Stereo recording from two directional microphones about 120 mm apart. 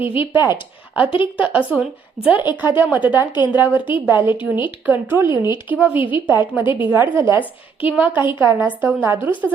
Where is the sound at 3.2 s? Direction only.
40° left (ahead or behind).